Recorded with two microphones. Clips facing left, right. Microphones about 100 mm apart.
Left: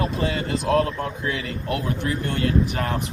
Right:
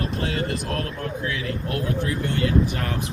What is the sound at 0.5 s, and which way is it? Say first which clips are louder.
Speech: left 8 dB; 90° left.